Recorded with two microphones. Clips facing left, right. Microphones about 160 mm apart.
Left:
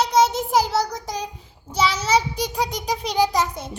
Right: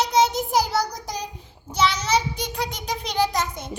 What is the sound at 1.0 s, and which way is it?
Child singing, 5° left (ahead or behind).